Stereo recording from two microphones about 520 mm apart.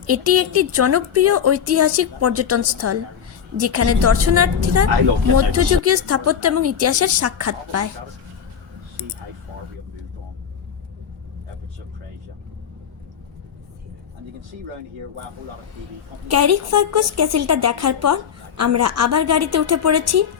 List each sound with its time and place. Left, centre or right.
0.1 s a woman's voice: right
16.3 s a woman's voice: right